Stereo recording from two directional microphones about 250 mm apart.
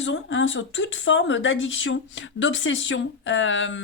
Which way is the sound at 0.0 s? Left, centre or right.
Left.